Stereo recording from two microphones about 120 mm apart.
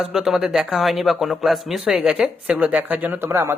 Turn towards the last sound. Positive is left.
turn(degrees=-20)  # may be behind; listen again after turning